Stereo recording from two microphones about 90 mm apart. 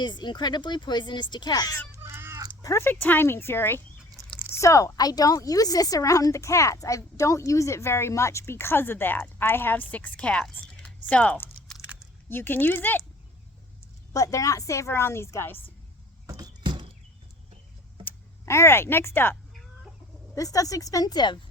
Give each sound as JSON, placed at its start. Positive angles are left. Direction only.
{"t": 0.0, "sound": "speech", "side_deg": 55}
{"t": 1.9, "sound": "cat", "side_deg": -25}
{"t": 2.6, "sound": "cat", "side_deg": 40}
{"t": 2.8, "sound": "speech", "side_deg": 20}
{"t": 4.5, "sound": "a woman's voice", "side_deg": 35}
{"t": 14.1, "sound": "a woman's voice", "side_deg": 35}
{"t": 16.4, "sound": "horse", "side_deg": -60}
{"t": 18.0, "sound": "speech", "side_deg": 30}
{"t": 20.3, "sound": "a woman's voice", "side_deg": 40}